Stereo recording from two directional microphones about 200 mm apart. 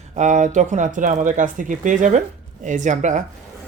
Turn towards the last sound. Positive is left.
turn(degrees=-35)  # may be behind; listen again after turning